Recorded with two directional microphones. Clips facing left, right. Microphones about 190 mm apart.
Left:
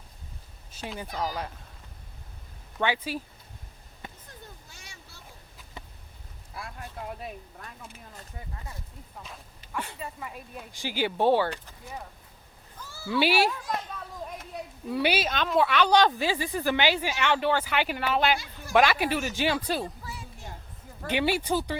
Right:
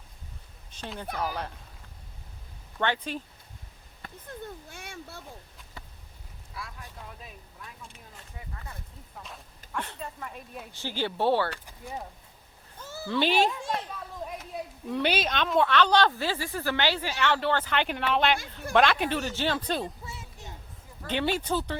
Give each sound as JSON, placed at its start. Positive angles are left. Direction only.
{"t": 0.7, "sound": "speech", "side_deg": 5}
{"t": 2.7, "sound": "speech", "side_deg": 5}
{"t": 4.3, "sound": "a sound", "side_deg": -55}
{"t": 5.8, "sound": "a sound", "side_deg": 20}
{"t": 6.5, "sound": "speech", "side_deg": 55}
{"t": 9.1, "sound": "speech", "side_deg": 0}
{"t": 10.7, "sound": "speech", "side_deg": 10}
{"t": 12.8, "sound": "a sound", "side_deg": -20}
{"t": 13.1, "sound": "speech", "side_deg": 10}
{"t": 13.5, "sound": "speech", "side_deg": -25}
{"t": 14.3, "sound": "speech", "side_deg": 0}
{"t": 19.8, "sound": "a sound", "side_deg": -25}
{"t": 21.1, "sound": "speech", "side_deg": 10}